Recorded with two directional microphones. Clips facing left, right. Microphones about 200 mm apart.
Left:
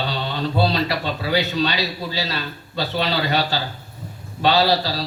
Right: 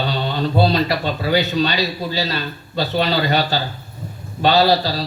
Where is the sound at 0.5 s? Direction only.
45° right (ahead or behind).